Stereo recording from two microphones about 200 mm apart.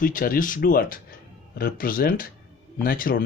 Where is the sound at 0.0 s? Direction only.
45° left (ahead or behind).